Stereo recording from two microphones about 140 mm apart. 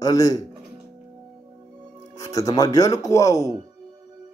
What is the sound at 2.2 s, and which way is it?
A man's voice, 25° left (ahead or behind).